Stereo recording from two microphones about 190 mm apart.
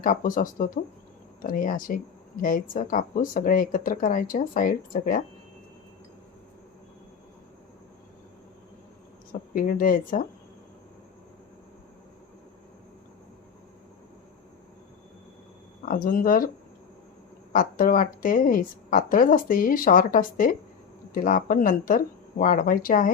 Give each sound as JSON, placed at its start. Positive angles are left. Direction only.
{"t": 0.0, "sound": "a woman's voice", "side_deg": 45}
{"t": 9.5, "sound": "a woman's voice", "side_deg": 45}
{"t": 15.9, "sound": "a woman's voice", "side_deg": 45}
{"t": 17.5, "sound": "a woman's voice", "side_deg": 45}